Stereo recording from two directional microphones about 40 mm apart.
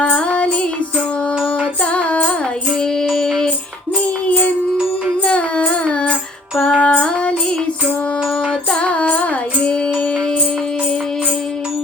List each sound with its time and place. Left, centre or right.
0.0 s music: left
1.8 s music: left
3.2 s child singing: centre
5.2 s music: left
8.7 s music: left